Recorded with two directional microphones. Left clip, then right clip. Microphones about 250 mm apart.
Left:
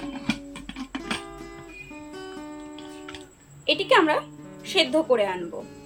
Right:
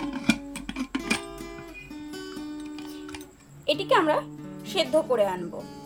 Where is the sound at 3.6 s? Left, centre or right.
Right.